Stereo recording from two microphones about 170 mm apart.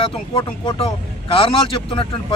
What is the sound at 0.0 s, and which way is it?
A man's voice, 30° left (ahead or behind).